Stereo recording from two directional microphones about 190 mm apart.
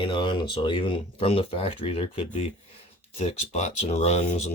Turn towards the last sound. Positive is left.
turn(degrees=35)  # may be behind; listen again after turning